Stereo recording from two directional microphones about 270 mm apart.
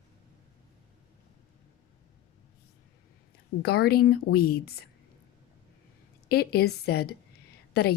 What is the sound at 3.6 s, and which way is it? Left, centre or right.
Speech, left.